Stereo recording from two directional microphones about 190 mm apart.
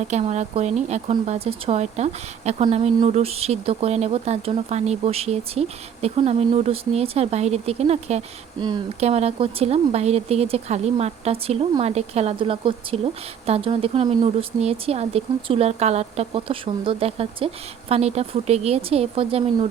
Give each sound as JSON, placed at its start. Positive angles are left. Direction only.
{"t": 0.0, "sound": "speech", "side_deg": -35}